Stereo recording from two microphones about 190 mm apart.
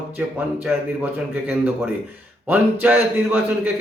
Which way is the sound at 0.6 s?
10° right (ahead or behind).